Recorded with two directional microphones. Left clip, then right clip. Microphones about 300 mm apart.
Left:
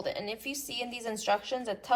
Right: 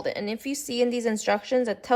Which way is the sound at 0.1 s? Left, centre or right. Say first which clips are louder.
Right 5 dB; right.